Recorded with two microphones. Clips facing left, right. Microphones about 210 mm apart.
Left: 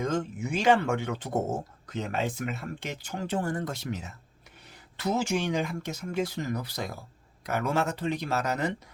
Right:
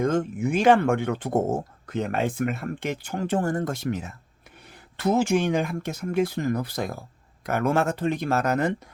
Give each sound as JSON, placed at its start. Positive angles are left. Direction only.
{"t": 0.0, "sound": "speech", "side_deg": -55}